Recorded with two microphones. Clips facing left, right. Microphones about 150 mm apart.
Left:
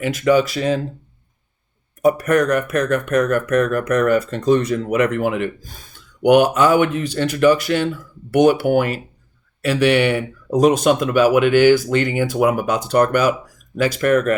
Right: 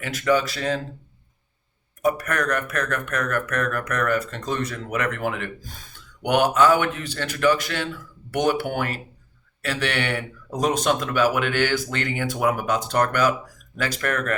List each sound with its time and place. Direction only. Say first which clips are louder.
0.0 s speech: left 6 dB; 15° left (ahead or behind)
2.0 s speech: left 8 dB; 15° left (ahead or behind)